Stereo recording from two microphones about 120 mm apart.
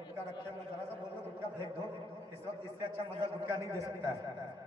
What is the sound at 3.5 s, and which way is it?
Speech, 25° right (ahead or behind).